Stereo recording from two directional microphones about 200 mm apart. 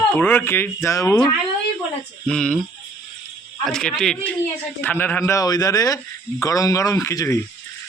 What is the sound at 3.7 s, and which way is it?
Speech, 5° left (ahead or behind).